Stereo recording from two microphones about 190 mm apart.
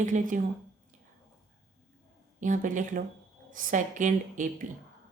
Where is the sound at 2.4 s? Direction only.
40° right (ahead or behind).